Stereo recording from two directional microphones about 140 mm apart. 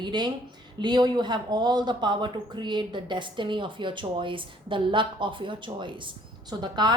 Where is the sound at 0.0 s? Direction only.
30° right (ahead or behind).